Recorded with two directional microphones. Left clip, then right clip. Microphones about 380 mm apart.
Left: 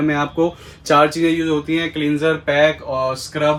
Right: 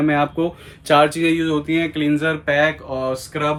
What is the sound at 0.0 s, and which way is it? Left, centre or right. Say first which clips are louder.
Speech: even; centre.